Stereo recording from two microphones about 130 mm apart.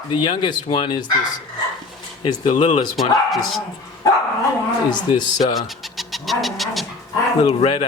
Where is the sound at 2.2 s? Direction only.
40° left (ahead or behind).